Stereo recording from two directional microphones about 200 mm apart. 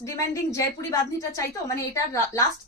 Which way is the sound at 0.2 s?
15° left (ahead or behind).